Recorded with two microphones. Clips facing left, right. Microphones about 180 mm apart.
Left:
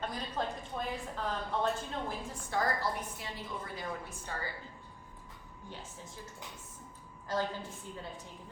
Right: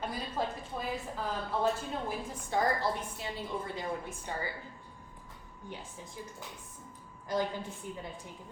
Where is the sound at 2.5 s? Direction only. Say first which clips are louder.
Right 3 dB; 25° right (ahead or behind).